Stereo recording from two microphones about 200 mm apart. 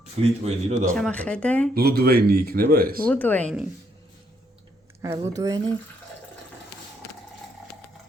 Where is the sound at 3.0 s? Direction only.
10° left (ahead or behind).